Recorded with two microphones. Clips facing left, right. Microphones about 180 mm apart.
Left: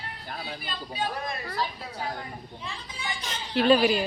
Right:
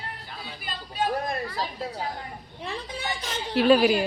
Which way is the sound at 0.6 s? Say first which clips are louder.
Right 5 dB; 45° right (ahead or behind).